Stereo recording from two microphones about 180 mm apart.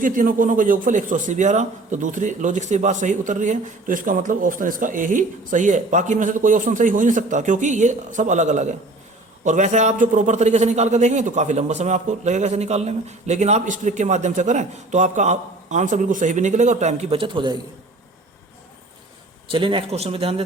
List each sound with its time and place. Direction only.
0.0 s a man's voice: 50° right (ahead or behind); by 17.6 s 25° right (ahead or behind)
19.5 s a man's voice: 30° right (ahead or behind)